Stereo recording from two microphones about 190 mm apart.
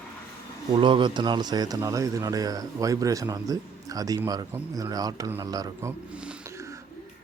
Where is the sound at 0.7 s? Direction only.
25° right (ahead or behind).